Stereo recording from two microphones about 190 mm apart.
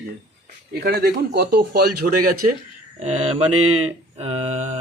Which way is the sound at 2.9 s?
35° right (ahead or behind).